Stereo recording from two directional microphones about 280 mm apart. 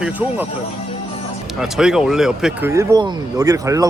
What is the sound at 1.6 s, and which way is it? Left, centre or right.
Speech, centre.